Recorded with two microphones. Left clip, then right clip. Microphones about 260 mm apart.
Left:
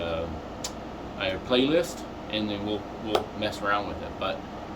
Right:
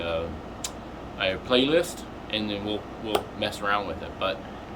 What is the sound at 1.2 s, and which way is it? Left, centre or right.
Speech, centre.